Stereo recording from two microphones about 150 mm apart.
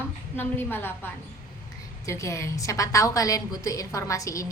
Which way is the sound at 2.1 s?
20° left (ahead or behind).